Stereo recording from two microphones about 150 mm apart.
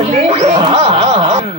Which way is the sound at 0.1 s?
35° right (ahead or behind).